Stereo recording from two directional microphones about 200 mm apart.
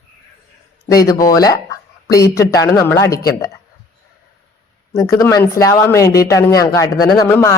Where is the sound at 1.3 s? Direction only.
20° left (ahead or behind).